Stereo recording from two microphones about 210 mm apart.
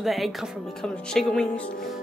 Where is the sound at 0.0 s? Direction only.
Centre (ahead or behind).